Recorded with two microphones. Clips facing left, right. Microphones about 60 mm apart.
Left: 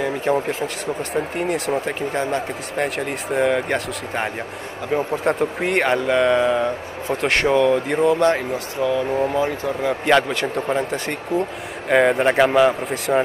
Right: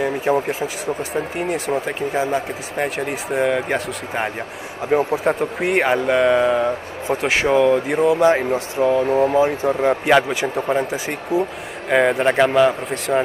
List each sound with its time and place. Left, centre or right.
0.0 s speech: centre
8.4 s speech: right
9.0 s speech: centre
9.3 s speech: right
10.0 s speech: centre